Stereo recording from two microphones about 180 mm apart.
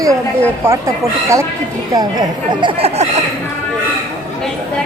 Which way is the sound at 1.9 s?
20° right (ahead or behind).